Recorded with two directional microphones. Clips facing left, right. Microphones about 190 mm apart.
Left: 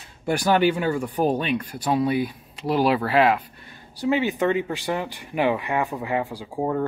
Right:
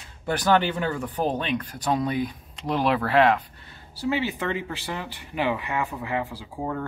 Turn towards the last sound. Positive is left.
turn(degrees=15)  # may be behind; listen again after turning